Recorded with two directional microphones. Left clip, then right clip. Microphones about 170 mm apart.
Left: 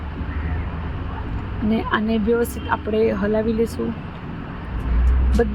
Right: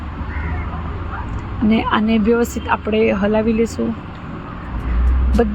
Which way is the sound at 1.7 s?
10° right (ahead or behind).